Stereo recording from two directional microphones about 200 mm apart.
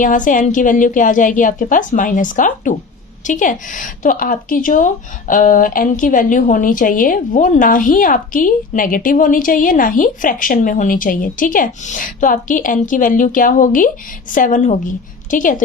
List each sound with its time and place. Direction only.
0.0 s a woman's voice: 40° left (ahead or behind)